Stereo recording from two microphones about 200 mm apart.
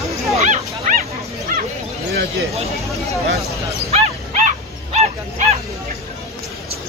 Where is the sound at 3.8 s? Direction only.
35° right (ahead or behind).